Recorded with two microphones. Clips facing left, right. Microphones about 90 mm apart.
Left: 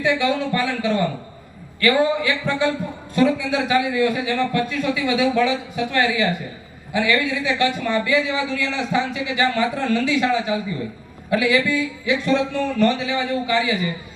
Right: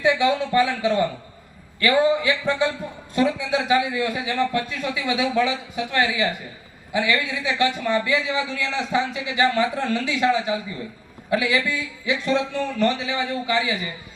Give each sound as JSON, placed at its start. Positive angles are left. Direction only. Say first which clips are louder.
{"t": 0.0, "sound": "speech", "louder": "even", "side_deg": -20}